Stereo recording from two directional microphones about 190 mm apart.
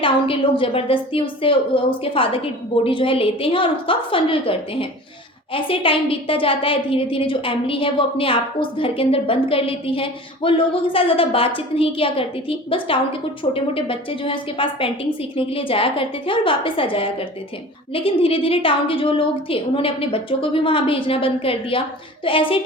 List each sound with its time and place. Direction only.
0.0 s a woman's voice: 25° left (ahead or behind)